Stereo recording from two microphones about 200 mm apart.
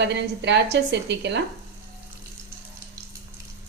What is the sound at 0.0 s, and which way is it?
A woman's voice, 60° right (ahead or behind).